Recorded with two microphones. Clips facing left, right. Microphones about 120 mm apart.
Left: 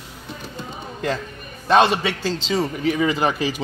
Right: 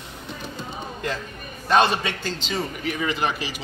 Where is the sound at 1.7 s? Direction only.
20° left (ahead or behind).